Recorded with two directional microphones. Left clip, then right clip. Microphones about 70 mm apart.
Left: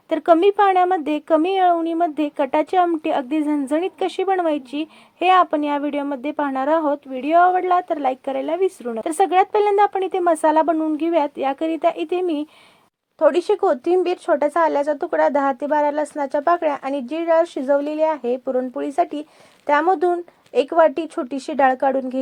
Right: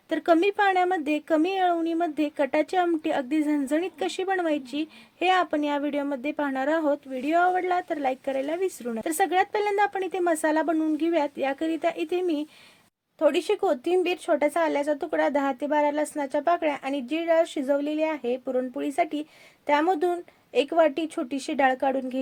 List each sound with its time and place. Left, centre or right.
0.1 s a woman's voice: left